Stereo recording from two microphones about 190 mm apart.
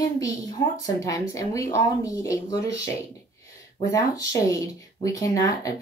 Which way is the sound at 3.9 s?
15° left (ahead or behind).